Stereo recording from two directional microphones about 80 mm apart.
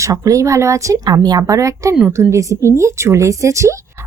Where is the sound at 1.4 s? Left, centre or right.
Right.